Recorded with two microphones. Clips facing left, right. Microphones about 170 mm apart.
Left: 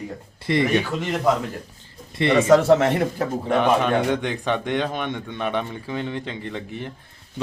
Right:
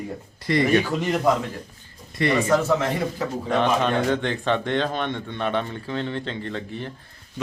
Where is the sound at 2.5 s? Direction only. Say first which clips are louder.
Left 9 dB; 70° left (ahead or behind).